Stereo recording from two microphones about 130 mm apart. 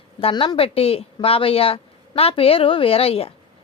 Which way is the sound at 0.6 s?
45° left (ahead or behind).